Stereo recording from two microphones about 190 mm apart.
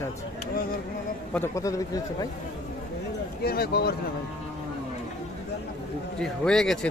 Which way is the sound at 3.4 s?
55° left (ahead or behind).